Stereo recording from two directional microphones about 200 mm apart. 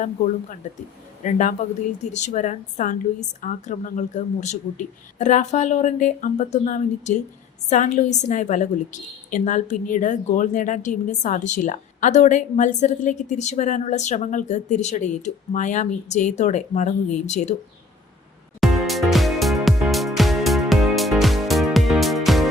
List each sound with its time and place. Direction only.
1.2 s a woman's voice: 40° left (ahead or behind)
18.6 s music: centre (ahead or behind)